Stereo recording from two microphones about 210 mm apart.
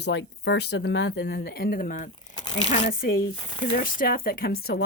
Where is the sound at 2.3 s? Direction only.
20° left (ahead or behind).